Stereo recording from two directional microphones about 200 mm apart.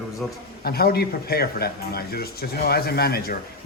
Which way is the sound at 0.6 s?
50° left (ahead or behind).